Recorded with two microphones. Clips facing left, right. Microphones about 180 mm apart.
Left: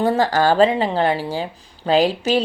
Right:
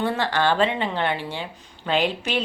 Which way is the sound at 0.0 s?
40° left (ahead or behind).